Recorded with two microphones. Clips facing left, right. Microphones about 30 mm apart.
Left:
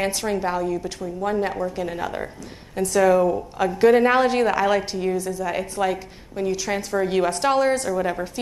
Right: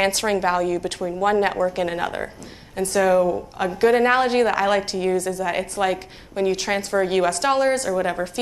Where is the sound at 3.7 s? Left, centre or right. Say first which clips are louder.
Left 1 dB; centre.